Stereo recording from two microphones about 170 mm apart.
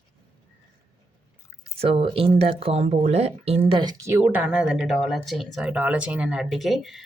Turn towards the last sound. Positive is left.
turn(degrees=0)  # may be behind; listen again after turning